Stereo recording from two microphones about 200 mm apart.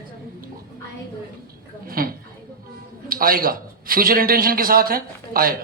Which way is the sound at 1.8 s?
45° right (ahead or behind).